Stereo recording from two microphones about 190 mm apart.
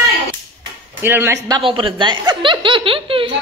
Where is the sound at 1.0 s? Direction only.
10° right (ahead or behind); by 3.3 s 30° right (ahead or behind).